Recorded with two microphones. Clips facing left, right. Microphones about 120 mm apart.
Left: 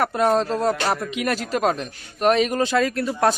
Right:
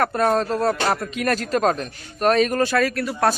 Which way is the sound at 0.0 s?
10° left (ahead or behind).